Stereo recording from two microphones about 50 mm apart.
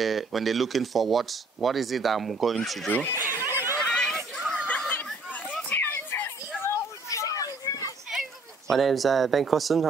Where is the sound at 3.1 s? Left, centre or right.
Right.